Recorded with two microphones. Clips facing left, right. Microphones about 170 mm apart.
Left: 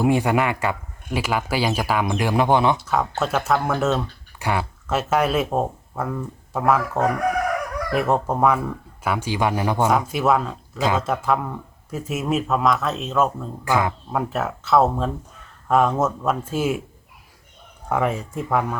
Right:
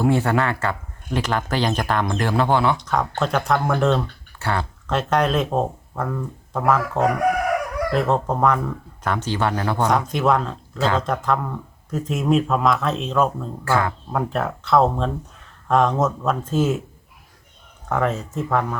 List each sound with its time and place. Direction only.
0.0 s speech: 15° left (ahead or behind)
2.7 s speech: 5° left (ahead or behind)
13.7 s speech: 15° left (ahead or behind)
14.1 s speech: 5° left (ahead or behind)
17.8 s speech: 10° left (ahead or behind)